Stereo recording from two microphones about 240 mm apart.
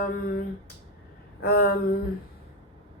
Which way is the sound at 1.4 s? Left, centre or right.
Left.